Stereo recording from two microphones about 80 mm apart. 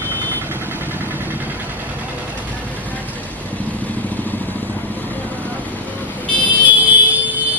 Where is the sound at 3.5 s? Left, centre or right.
Centre.